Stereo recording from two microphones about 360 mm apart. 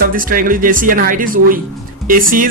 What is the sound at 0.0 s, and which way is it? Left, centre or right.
Speech, right.